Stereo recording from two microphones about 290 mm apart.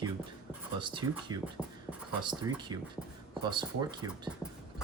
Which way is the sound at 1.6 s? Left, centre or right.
Centre.